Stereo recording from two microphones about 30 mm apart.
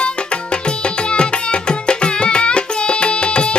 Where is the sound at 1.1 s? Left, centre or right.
Left.